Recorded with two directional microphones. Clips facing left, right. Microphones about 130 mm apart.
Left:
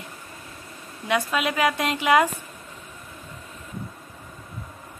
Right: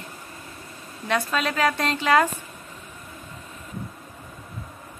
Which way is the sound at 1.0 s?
10° left (ahead or behind).